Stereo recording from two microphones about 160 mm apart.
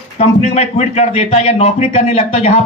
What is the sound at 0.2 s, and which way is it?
A man's voice, 40° left (ahead or behind).